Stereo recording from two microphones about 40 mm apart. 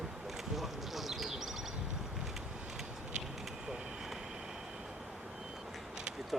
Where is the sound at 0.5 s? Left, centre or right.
Centre.